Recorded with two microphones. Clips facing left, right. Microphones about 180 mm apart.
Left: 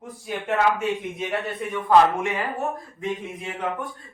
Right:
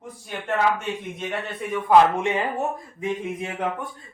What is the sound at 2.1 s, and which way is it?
Speech, 20° right (ahead or behind).